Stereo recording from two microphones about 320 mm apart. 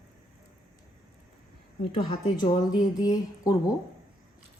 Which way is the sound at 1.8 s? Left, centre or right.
Centre.